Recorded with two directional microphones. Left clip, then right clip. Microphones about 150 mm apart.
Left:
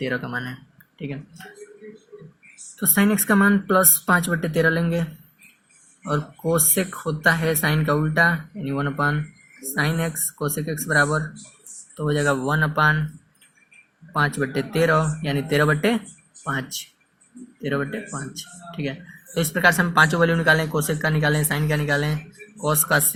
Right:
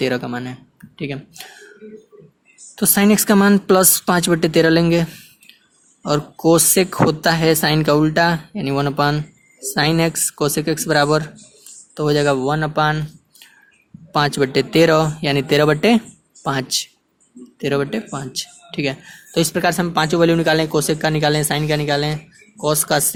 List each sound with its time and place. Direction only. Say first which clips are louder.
0.2 s speech: right 2 dB; 50° right (ahead or behind)
0.9 s speech: right 7 dB; 65° right (ahead or behind)
2.7 s speech: right 6 dB; 80° right
6.1 s speech: right 8 dB; 75° right (ahead or behind); by 11.2 s 90° right
11.9 s speech: right 6 dB; 65° right (ahead or behind)
14.1 s speech: right 6 dB; 80° right
16.4 s speech: right 5 dB; 65° right (ahead or behind)
17.6 s speech: right 6 dB; 85° right
19.5 s speech: left 4 dB; 40° right (ahead or behind)